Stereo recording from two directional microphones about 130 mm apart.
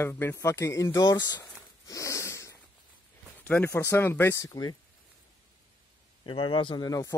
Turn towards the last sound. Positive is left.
turn(degrees=30)  # may be behind; listen again after turning